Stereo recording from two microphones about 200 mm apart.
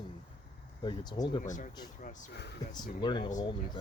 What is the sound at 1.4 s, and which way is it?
Speech, 40° left (ahead or behind).